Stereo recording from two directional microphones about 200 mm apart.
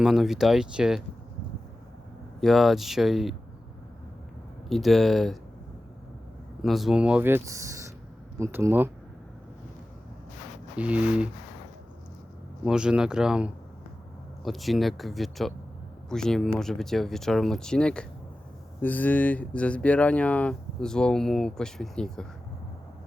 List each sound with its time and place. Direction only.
0.0 s speech: centre (ahead or behind)
2.4 s speech: centre (ahead or behind)
4.7 s speech: centre (ahead or behind)
6.6 s speech: centre (ahead or behind)
10.8 s speech: 5° right (ahead or behind)
12.6 s speech: 5° right (ahead or behind)